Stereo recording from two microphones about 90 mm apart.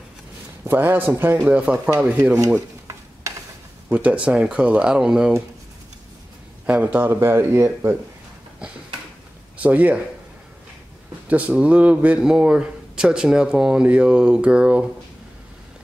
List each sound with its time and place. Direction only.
0.7 s speech: 20° right (ahead or behind)
1.4 s a man's voice: 15° right (ahead or behind)
3.3 s a sound: 35° right (ahead or behind)
3.9 s a man's voice: 15° right (ahead or behind)
6.6 s speech: 15° right (ahead or behind)
9.6 s a man's voice: 15° right (ahead or behind)
11.2 s a man's voice: 15° right (ahead or behind)